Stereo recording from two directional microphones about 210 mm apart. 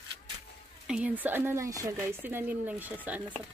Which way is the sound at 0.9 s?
5° right (ahead or behind).